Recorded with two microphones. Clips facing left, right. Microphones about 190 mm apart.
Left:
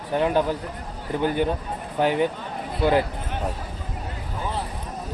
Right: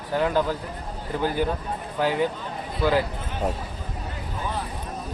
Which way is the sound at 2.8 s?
20° left (ahead or behind).